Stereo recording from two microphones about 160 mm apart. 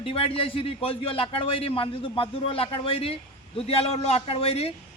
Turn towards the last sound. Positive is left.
turn(degrees=40)  # may be behind; listen again after turning